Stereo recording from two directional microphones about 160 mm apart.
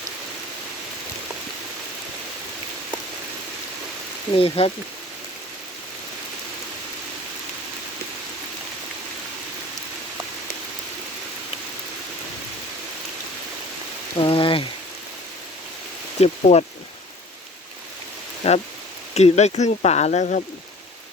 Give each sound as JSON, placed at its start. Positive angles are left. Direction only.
{"t": 4.4, "sound": "speech", "side_deg": 35}
{"t": 14.2, "sound": "a sound", "side_deg": 35}
{"t": 16.2, "sound": "speech", "side_deg": 40}
{"t": 18.4, "sound": "speech", "side_deg": 40}